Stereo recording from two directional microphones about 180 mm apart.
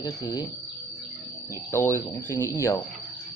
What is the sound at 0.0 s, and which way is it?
Speech, 20° left (ahead or behind).